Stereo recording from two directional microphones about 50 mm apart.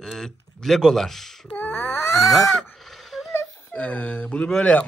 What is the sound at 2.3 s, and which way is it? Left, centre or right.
Speech, centre.